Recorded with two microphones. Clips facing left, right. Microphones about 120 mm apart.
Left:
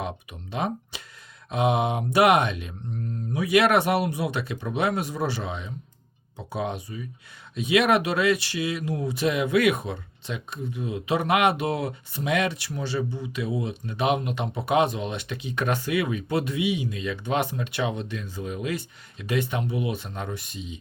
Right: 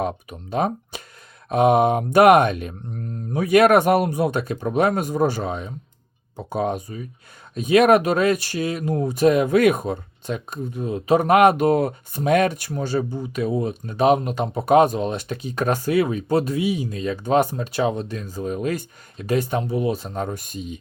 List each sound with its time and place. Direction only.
0.0 s speech: 45° right (ahead or behind)